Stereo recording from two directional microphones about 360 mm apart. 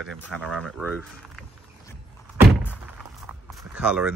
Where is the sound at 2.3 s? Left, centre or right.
Centre.